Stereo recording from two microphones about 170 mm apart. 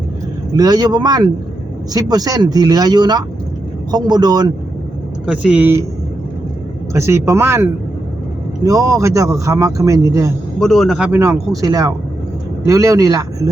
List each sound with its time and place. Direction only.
0.5 s speech: 20° right (ahead or behind)
5.2 s speech: 5° right (ahead or behind)
6.9 s speech: 15° right (ahead or behind)
10.6 s a man's voice: centre (ahead or behind)
11.2 s speech: 20° right (ahead or behind)